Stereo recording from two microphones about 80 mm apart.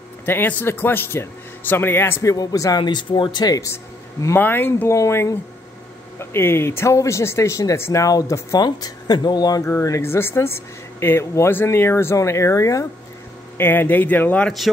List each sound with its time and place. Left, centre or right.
0.2 s a man's voice: left
2.2 s speech: left
2.8 s speech: left
3.7 s a man's voice: left
4.9 s speech: left
8.5 s speech: left
9.7 s speech: left
13.6 s a man's voice: left